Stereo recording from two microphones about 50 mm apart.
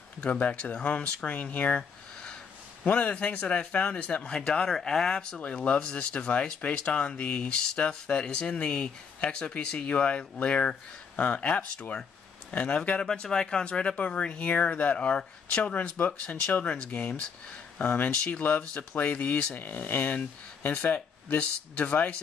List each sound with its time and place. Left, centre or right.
0.2 s speech: left
2.8 s speech: left
5.4 s speech: left
13.0 s speech: centre
15.7 s speech: left